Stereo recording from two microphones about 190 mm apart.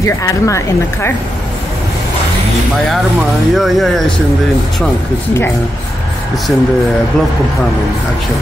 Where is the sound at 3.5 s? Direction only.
Centre (ahead or behind).